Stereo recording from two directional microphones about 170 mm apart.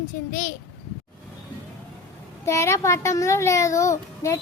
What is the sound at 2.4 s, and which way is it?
A child's voice, 15° left (ahead or behind).